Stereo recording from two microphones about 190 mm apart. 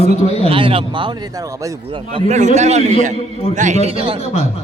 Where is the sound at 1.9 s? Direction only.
25° right (ahead or behind).